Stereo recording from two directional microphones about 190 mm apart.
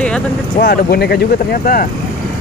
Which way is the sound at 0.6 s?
55° left (ahead or behind).